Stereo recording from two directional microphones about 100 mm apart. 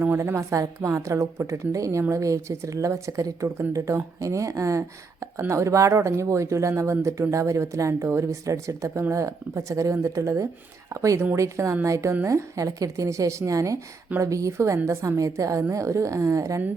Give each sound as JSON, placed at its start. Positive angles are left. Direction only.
{"t": 0.0, "sound": "a woman's voice", "side_deg": -20}
{"t": 0.3, "sound": "speech", "side_deg": -30}